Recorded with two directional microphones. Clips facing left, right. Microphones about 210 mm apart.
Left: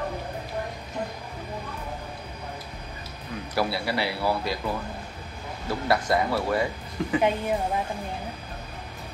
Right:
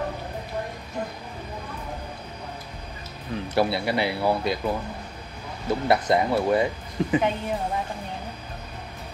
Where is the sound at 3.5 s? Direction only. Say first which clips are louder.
Right 3 dB; 25° right (ahead or behind).